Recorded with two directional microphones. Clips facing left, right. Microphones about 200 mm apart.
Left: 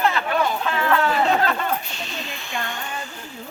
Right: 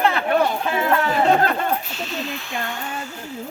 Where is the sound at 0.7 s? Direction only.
15° right (ahead or behind).